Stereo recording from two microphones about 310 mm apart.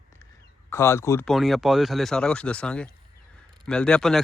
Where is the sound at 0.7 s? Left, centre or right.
Centre.